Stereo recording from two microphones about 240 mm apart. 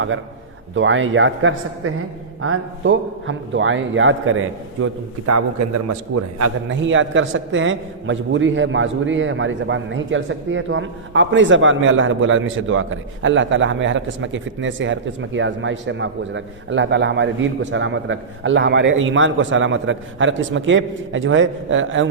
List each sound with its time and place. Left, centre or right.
0.8 s a man's voice: right
6.7 s a man's voice: right